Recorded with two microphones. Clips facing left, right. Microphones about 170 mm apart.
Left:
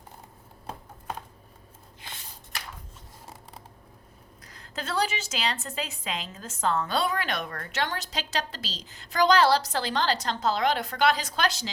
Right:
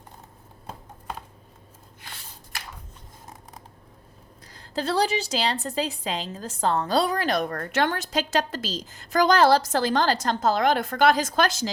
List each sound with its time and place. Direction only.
4.4 s a woman's voice: 30° right (ahead or behind); by 11.7 s 45° right (ahead or behind)